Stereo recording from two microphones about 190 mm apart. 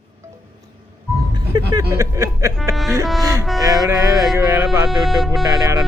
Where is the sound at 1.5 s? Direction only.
15° right (ahead or behind).